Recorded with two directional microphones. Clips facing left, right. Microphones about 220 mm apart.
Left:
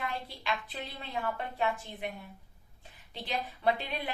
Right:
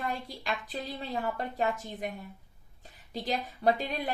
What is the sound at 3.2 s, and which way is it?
Speech, 40° right (ahead or behind).